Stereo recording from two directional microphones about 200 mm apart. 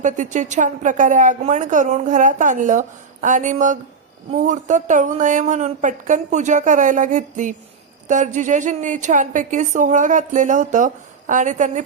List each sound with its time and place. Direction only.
0.0 s a woman's voice: 40° right (ahead or behind)